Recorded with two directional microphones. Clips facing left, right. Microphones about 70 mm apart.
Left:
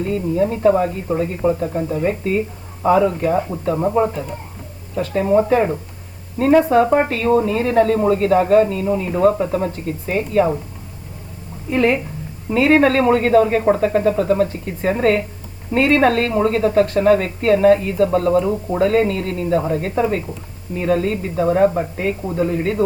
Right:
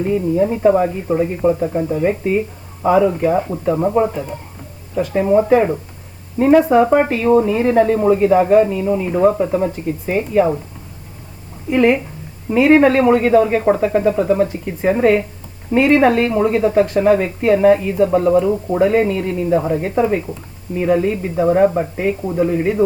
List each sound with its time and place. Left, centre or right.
0.0 s speech: centre
4.1 s speech: centre
6.4 s speech: centre
11.7 s speech: right
18.4 s speech: centre
18.8 s speech: centre